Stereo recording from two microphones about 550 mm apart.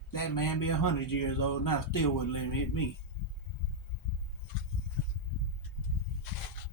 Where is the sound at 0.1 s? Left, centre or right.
Left.